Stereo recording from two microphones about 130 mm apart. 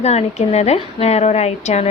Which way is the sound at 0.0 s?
55° left (ahead or behind).